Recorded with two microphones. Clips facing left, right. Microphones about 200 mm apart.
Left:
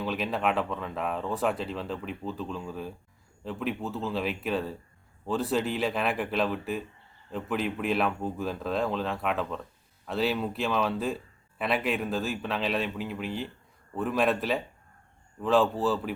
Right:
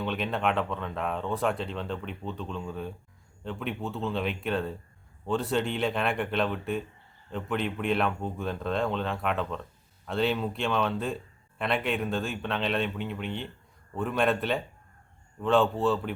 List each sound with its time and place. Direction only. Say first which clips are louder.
0.0 s speech: even; centre (ahead or behind)